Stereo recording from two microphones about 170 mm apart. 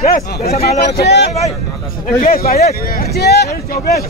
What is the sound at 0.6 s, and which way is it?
Speech, 70° left (ahead or behind).